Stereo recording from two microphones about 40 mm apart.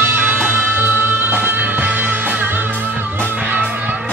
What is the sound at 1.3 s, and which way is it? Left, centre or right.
Music, right.